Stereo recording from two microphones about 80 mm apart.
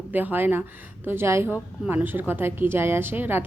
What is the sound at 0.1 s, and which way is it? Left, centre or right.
A woman's voice, right.